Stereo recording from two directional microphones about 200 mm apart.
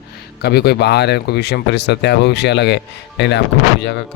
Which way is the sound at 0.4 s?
55° left (ahead or behind).